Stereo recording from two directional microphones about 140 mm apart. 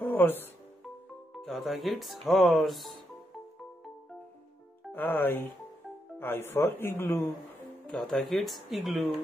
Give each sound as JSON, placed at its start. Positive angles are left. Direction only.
{"t": 0.2, "sound": "speech", "side_deg": 15}
{"t": 1.3, "sound": "speech", "side_deg": 0}
{"t": 4.9, "sound": "speech", "side_deg": 15}
{"t": 7.8, "sound": "speech", "side_deg": 5}